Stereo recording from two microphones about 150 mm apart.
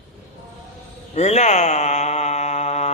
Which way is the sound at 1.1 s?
50° left (ahead or behind).